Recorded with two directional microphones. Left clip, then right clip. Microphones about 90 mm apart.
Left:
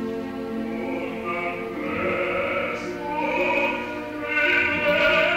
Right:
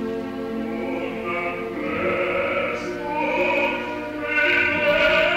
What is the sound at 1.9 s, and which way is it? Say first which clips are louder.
Sheep: right 2 dB; 30° right (ahead or behind).